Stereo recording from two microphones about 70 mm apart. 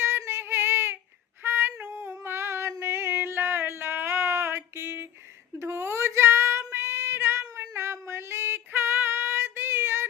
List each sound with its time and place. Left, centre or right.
0.0 s female singing: right
1.9 s a sound: right
6.7 s female singing: right